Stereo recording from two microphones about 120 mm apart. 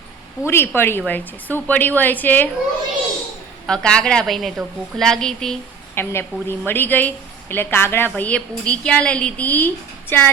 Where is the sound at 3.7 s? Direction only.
5° left (ahead or behind).